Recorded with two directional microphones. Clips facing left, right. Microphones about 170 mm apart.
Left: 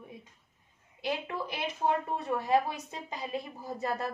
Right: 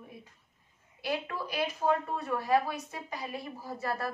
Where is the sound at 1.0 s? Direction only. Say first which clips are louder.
Even; 20° left (ahead or behind).